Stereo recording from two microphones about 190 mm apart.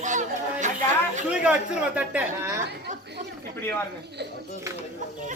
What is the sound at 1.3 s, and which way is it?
Speech, 5° right (ahead or behind).